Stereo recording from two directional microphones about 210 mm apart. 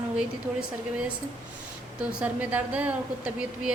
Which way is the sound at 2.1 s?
5° right (ahead or behind).